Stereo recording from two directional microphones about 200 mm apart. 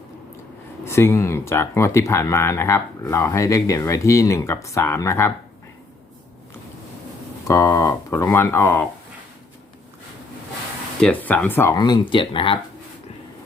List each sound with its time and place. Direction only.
0.9 s speech: 15° left (ahead or behind)
7.4 s speech: 15° left (ahead or behind)
11.0 s speech: 10° left (ahead or behind); by 12.5 s 25° left (ahead or behind)